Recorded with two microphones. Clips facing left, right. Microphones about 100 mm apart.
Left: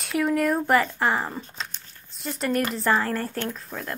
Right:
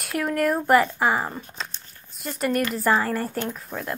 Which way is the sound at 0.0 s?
Centre (ahead or behind).